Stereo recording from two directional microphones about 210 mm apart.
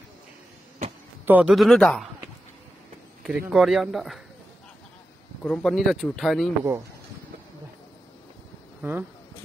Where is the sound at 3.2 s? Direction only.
5° right (ahead or behind).